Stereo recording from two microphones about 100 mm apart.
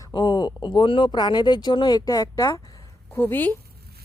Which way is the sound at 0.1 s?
50° left (ahead or behind).